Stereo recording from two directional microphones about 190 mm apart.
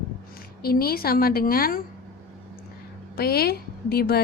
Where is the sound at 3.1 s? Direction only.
55° left (ahead or behind).